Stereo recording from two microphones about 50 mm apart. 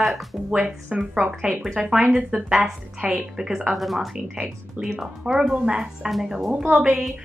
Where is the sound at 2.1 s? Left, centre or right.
Centre.